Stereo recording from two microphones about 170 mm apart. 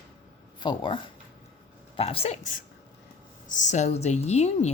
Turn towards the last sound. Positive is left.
turn(degrees=40)  # may be behind; listen again after turning